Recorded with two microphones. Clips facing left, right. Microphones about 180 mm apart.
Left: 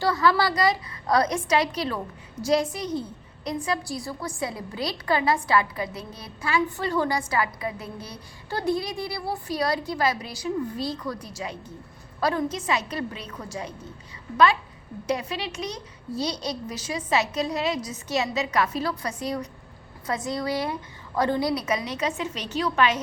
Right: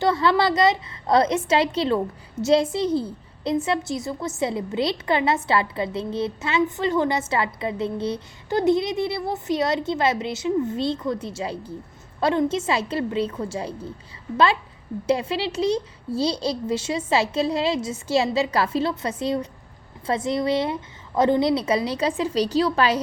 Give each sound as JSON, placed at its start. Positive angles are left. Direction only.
{"t": 0.0, "sound": "a woman's voice", "side_deg": -25}
{"t": 15.0, "sound": "a woman's voice", "side_deg": -30}